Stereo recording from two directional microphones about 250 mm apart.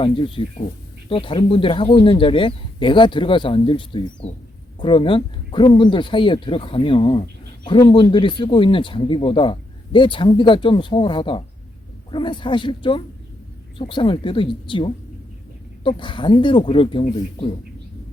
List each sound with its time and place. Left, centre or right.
0.4 s speech: left
15.8 s speech: centre